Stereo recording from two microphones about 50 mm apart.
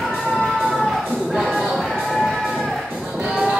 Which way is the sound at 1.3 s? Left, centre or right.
Centre.